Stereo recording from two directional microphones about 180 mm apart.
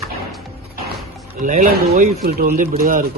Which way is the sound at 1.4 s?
45° right (ahead or behind).